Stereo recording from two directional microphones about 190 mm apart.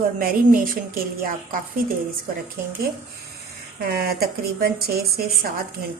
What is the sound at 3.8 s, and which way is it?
A woman's voice, 50° right (ahead or behind).